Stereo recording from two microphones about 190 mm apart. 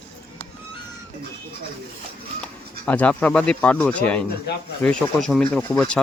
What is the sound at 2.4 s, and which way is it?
Speech, 5° left (ahead or behind).